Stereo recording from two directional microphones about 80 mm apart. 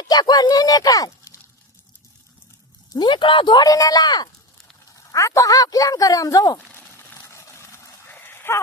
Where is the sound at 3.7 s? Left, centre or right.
Left.